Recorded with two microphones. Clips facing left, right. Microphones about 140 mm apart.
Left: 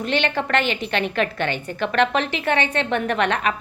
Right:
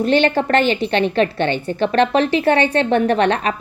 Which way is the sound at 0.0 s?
35° right (ahead or behind).